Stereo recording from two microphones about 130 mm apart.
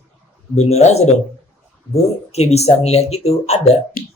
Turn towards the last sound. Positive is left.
turn(degrees=55)  # may be behind; listen again after turning